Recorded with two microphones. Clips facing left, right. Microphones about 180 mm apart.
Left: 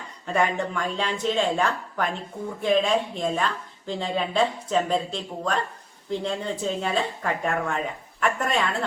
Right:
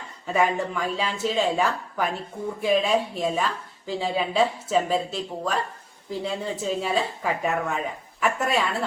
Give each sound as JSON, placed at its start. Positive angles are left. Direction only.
{"t": 0.3, "sound": "speech", "side_deg": -5}